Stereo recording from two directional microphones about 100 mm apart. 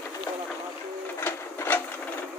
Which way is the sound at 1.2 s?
25° left (ahead or behind).